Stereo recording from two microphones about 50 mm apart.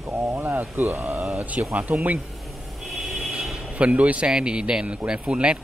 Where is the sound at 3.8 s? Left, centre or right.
Right.